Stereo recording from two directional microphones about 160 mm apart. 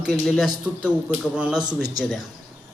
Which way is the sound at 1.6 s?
25° right (ahead or behind).